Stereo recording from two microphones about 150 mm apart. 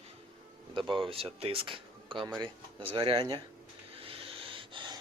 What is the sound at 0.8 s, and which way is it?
Speech, 35° right (ahead or behind).